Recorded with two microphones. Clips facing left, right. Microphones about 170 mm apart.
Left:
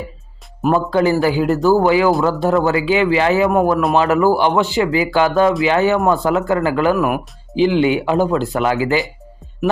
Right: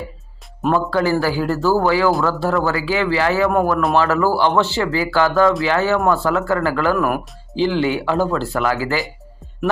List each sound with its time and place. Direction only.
0.7 s speech: 20° left (ahead or behind)